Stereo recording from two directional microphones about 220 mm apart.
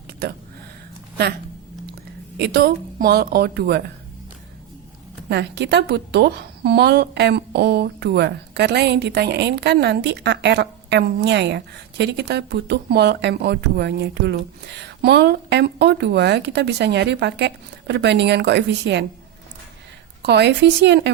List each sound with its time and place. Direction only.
0.1 s a sound: 45° right (ahead or behind)
2.4 s a woman's voice: 45° right (ahead or behind)
5.3 s a woman's voice: 50° right (ahead or behind)
20.2 s a woman's voice: 50° right (ahead or behind)